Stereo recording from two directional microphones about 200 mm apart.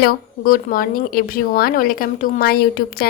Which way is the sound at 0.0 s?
50° left (ahead or behind).